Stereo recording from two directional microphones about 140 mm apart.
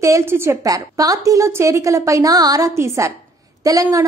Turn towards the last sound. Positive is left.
turn(degrees=-25)  # may be behind; listen again after turning